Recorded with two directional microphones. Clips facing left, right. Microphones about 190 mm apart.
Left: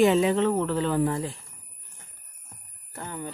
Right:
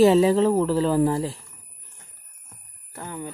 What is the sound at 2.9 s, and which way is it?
Speech, 10° right (ahead or behind).